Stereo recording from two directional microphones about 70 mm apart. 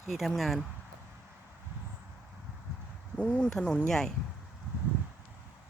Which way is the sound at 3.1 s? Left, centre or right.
Centre.